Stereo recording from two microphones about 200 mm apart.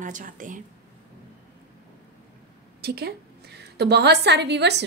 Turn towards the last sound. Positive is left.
turn(degrees=-60)  # may be behind; listen again after turning